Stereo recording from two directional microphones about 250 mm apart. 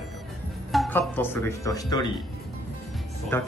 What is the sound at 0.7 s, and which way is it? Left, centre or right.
Speech, centre.